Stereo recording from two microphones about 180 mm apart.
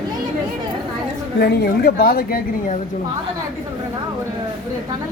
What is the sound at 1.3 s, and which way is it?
A woman's voice, 60° left (ahead or behind).